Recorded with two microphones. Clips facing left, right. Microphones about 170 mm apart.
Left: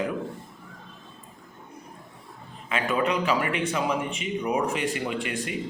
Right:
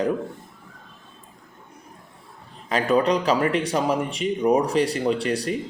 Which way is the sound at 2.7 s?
35° right (ahead or behind).